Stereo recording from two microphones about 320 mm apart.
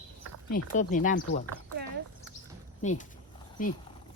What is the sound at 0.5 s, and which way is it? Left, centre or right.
Speech, left.